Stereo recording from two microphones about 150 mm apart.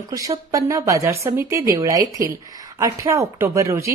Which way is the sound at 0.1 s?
20° right (ahead or behind).